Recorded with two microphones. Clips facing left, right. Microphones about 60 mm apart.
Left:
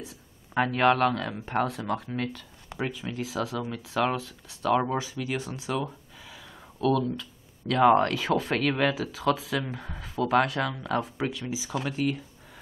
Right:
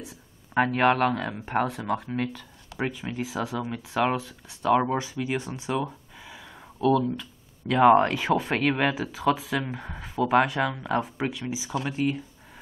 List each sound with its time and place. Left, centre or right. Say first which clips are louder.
0.6 s speech: right 1 dB; centre
2.8 s speech: right 2 dB; centre